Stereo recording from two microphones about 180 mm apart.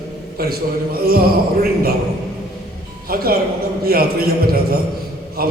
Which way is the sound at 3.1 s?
55° right (ahead or behind).